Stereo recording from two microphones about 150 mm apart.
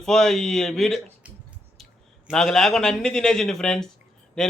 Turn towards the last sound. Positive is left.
turn(degrees=5)  # may be behind; listen again after turning